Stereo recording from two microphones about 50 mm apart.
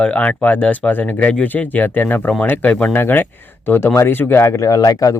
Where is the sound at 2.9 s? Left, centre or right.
Left.